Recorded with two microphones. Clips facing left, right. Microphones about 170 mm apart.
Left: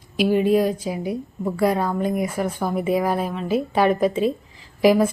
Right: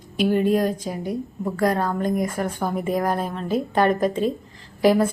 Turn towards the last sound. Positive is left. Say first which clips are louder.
# left 1 dB
turn(degrees=10)  # may be behind; listen again after turning